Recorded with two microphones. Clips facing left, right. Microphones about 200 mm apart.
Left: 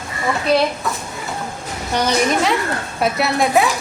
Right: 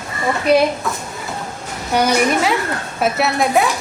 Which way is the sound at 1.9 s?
10° right (ahead or behind).